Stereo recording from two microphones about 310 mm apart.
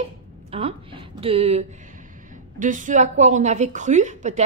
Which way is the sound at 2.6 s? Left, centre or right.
Right.